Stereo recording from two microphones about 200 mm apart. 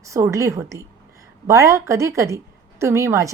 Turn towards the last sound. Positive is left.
turn(degrees=-15)  # may be behind; listen again after turning